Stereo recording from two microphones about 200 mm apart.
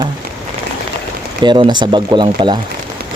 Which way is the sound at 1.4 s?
20° right (ahead or behind).